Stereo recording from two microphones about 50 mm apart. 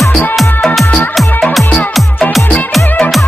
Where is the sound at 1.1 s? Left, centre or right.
Centre.